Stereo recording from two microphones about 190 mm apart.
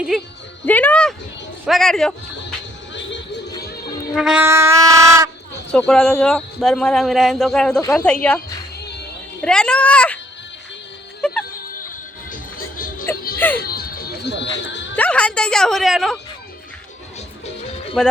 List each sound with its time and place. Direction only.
0.6 s speech: 10° left (ahead or behind)
4.1 s wind instrument: 5° right (ahead or behind)
5.7 s a child's voice: 5° left (ahead or behind)
8.8 s music: 60° left (ahead or behind)
9.4 s a child's voice: 5° left (ahead or behind)
12.3 s music: 50° left (ahead or behind)
13.6 s dog: 55° left (ahead or behind); by 14.9 s 70° left (ahead or behind)
14.9 s speech: 5° left (ahead or behind)
18.0 s speech: 5° left (ahead or behind)